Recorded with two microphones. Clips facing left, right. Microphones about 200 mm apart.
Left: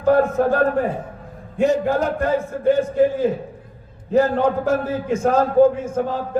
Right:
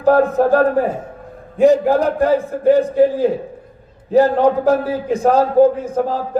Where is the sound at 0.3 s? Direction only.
35° right (ahead or behind).